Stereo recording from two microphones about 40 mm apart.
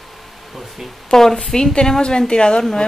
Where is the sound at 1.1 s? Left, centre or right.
Centre.